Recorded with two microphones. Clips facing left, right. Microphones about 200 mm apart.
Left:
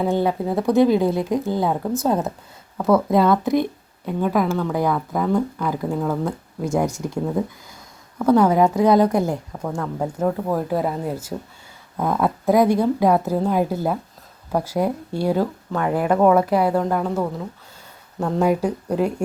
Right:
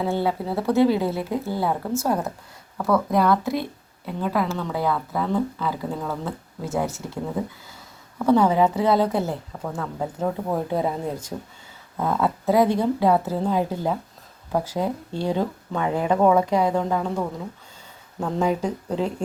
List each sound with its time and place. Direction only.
0.0 s speech: 15° left (ahead or behind)
8.7 s speech: 15° left (ahead or behind)